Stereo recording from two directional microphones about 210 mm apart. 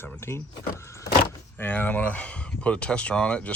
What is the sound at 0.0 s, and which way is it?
Speech, 10° left (ahead or behind).